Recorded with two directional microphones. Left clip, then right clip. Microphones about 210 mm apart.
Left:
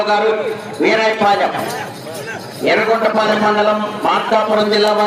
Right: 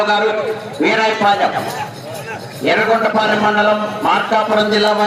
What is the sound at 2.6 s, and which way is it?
A man's voice, 15° left (ahead or behind).